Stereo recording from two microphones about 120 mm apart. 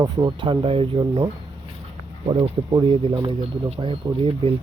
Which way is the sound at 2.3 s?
50° right (ahead or behind).